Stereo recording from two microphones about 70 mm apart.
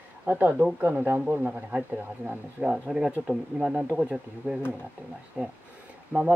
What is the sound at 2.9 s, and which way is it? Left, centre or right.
Speech, centre.